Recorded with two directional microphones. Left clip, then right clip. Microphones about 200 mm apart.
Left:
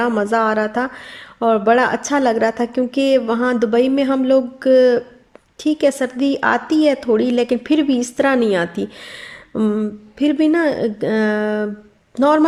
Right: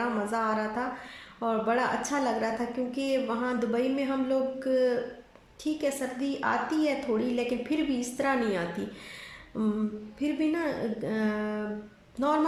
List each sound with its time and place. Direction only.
0.0 s speech: 45° left (ahead or behind)